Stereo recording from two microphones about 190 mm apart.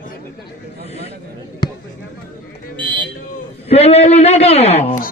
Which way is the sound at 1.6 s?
20° left (ahead or behind).